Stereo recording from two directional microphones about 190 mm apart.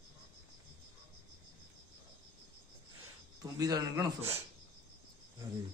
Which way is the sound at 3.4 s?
20° right (ahead or behind).